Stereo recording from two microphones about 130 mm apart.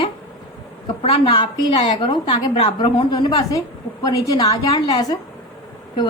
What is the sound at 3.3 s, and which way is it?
A woman's voice, 30° left (ahead or behind).